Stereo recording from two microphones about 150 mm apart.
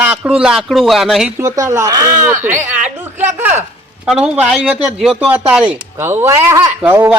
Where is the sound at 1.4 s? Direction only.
20° right (ahead or behind).